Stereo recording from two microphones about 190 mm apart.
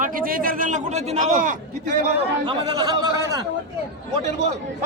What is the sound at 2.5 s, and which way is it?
Speech, 20° right (ahead or behind).